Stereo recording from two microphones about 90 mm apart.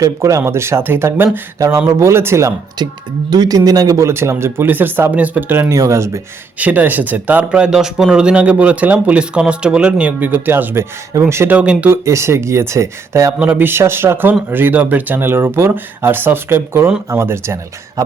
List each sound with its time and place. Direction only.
0.0 s speech: 35° right (ahead or behind)
1.5 s speech: 35° right (ahead or behind)
3.2 s speech: 50° right (ahead or behind); by 5.7 s 20° right (ahead or behind)
5.7 s speech: 35° right (ahead or behind)
6.6 s speech: 20° right (ahead or behind)
11.5 s speech: 15° right (ahead or behind)
11.9 s speech: 30° right (ahead or behind)
13.4 s speech: 20° right (ahead or behind)